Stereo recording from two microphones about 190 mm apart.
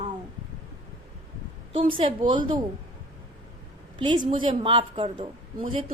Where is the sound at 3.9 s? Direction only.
25° right (ahead or behind).